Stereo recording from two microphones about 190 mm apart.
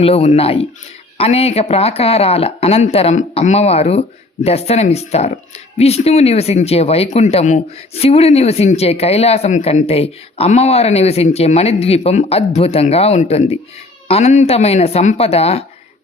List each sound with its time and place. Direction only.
0.0 s speech: 35° left (ahead or behind)